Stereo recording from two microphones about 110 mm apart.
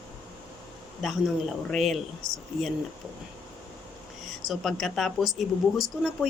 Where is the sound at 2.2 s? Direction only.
30° right (ahead or behind).